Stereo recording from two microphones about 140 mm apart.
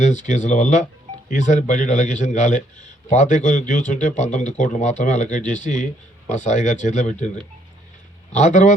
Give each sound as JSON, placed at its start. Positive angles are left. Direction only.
{"t": 0.0, "sound": "speech", "side_deg": 60}
{"t": 8.3, "sound": "speech", "side_deg": 60}